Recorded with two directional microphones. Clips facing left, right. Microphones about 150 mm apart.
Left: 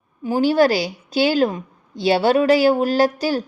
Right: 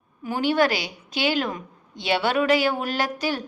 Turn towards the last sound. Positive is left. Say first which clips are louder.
# left 8 dB
turn(degrees=35)  # may be behind; listen again after turning